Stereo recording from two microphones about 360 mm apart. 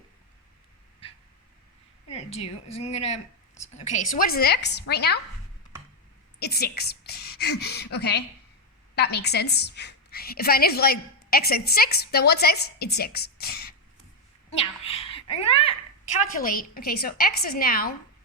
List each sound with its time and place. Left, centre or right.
2.0 s a woman's voice: centre
6.4 s a woman's voice: left